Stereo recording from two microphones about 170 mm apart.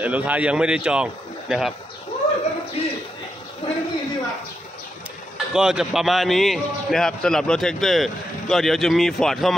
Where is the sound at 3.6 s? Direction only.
30° left (ahead or behind).